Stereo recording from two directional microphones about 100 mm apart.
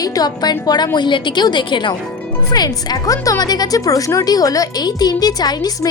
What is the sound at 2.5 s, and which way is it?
A woman's voice, 40° left (ahead or behind).